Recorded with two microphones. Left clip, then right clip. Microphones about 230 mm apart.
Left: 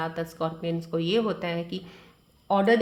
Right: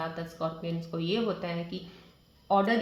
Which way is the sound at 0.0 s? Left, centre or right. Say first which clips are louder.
Left 4 dB; left.